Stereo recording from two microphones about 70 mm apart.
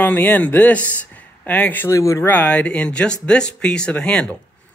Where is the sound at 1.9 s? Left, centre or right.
Left.